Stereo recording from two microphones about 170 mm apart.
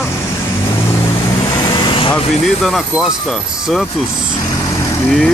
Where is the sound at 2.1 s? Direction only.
Centre (ahead or behind).